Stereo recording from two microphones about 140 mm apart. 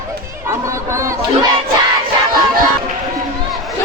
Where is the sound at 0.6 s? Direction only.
20° right (ahead or behind).